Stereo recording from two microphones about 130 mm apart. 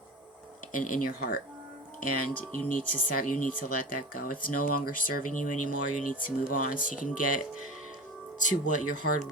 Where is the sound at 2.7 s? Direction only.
90° left.